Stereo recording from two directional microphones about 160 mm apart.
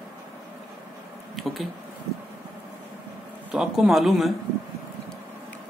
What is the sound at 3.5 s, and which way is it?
Speech, 5° right (ahead or behind).